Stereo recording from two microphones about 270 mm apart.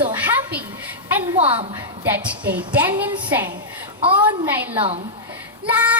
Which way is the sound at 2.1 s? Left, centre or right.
Centre.